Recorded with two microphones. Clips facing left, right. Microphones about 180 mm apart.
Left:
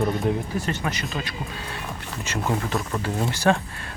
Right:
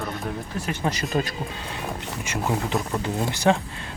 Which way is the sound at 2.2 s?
15° right (ahead or behind).